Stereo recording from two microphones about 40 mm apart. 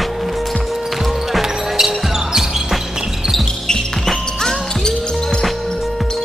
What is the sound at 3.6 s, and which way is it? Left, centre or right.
Basketball bounce, centre.